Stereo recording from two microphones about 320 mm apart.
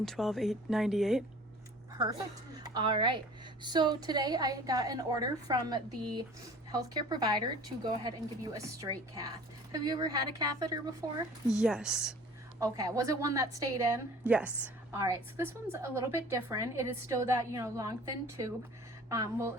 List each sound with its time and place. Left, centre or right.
0.0 s speech: centre
2.0 s a woman's voice: centre